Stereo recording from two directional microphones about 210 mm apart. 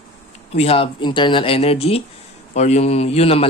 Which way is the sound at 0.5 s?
30° left (ahead or behind).